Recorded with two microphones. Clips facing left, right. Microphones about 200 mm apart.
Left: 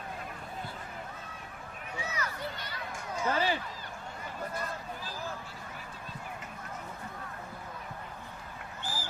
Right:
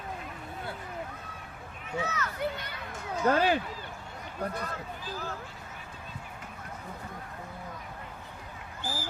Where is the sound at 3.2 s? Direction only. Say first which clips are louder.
Right 6 dB; 55° right (ahead or behind).